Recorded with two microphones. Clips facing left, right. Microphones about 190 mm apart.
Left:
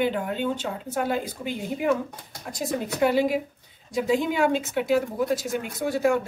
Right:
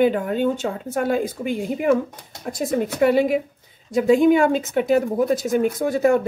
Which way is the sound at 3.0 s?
55° right (ahead or behind).